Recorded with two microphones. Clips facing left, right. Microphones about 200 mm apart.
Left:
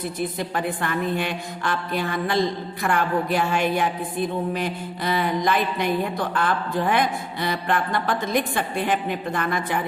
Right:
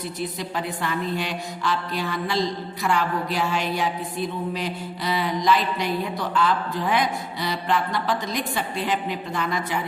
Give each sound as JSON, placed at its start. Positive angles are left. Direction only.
{"t": 0.0, "sound": "mantra", "side_deg": 55}